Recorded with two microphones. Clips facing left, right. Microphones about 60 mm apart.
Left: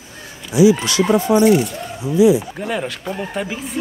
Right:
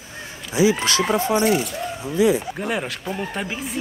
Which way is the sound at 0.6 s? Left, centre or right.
Right.